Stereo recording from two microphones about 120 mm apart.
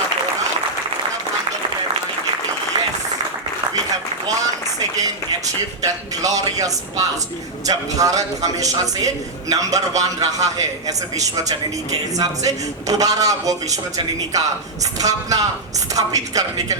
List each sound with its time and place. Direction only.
5.8 s a man's voice: 30° right (ahead or behind)
14.9 s a man's voice: 30° right (ahead or behind)